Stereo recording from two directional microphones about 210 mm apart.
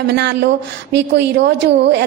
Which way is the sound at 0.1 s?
55° right (ahead or behind).